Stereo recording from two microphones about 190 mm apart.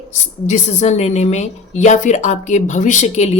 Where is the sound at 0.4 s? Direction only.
35° left (ahead or behind).